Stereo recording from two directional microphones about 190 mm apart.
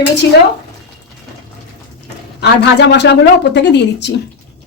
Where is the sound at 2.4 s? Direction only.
60° left (ahead or behind).